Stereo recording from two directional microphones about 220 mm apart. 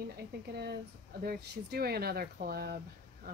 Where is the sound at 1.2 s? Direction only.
45° right (ahead or behind).